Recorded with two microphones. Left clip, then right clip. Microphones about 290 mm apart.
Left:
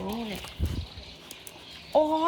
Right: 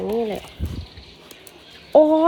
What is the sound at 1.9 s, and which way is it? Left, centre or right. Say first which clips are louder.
Chicken: right 10 dB; left.